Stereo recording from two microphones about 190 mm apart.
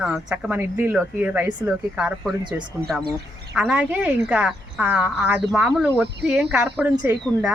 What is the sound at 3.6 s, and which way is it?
Speech, 5° right (ahead or behind).